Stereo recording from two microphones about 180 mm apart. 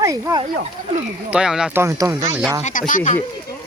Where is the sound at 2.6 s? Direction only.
45° left (ahead or behind).